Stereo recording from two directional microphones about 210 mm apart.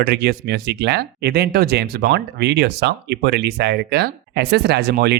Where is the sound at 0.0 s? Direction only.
50° right (ahead or behind).